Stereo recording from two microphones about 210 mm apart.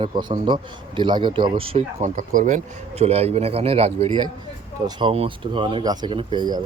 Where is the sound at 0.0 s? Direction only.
20° right (ahead or behind).